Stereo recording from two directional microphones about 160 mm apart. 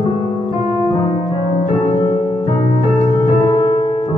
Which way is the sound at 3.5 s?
40° left (ahead or behind).